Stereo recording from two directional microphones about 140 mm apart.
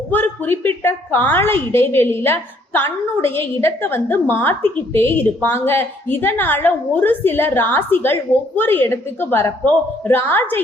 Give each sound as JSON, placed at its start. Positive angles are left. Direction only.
{"t": 0.1, "sound": "a woman's voice", "side_deg": 15}